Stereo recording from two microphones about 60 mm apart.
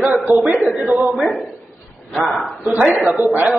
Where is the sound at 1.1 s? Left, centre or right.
Centre.